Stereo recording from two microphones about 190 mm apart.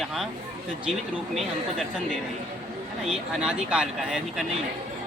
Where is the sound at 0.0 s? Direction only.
Centre (ahead or behind).